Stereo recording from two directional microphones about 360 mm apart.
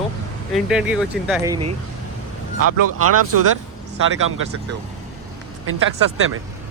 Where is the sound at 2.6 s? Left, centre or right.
Right.